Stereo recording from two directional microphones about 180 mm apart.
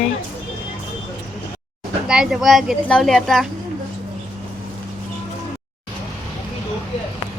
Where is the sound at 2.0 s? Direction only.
5° right (ahead or behind).